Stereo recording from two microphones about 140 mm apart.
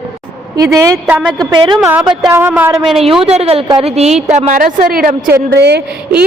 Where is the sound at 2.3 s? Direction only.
15° right (ahead or behind).